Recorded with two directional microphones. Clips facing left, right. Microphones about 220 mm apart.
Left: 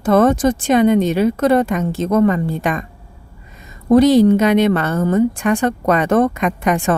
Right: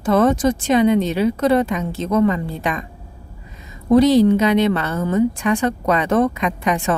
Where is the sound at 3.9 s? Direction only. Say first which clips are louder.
Left 2 dB; 50° left (ahead or behind).